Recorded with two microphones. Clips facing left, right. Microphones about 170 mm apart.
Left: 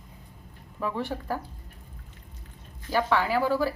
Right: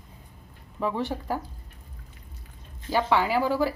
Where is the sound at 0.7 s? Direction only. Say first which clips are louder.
Right 2 dB; 20° right (ahead or behind).